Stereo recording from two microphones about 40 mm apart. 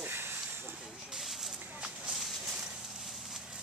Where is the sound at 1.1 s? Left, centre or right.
Centre.